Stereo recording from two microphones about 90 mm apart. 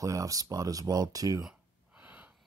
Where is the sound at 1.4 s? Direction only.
10° right (ahead or behind).